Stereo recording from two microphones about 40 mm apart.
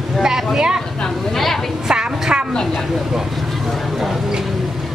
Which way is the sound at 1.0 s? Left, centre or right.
Centre.